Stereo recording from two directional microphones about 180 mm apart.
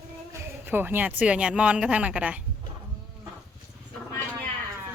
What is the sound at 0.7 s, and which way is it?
Speech, 10° right (ahead or behind).